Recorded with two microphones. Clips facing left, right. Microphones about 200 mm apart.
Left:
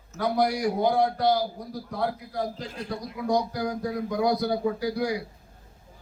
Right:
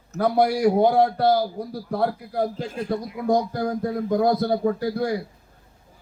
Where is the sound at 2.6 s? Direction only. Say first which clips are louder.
Right 6 dB; 50° right (ahead or behind).